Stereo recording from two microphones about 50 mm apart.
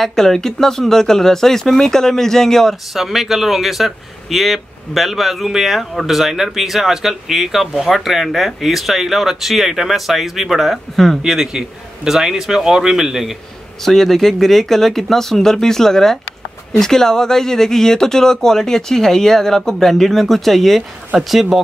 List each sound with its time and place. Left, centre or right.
0.0 s speech: centre
2.9 s speech: centre
11.2 s a man's voice: centre
13.8 s speech: centre